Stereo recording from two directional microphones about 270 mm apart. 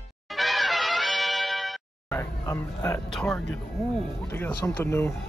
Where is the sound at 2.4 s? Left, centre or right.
Centre.